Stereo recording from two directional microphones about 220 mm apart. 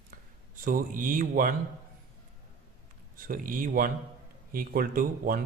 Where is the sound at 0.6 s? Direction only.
40° right (ahead or behind).